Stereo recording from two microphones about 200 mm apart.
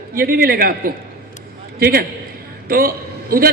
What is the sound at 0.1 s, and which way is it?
A man's voice, 45° right (ahead or behind).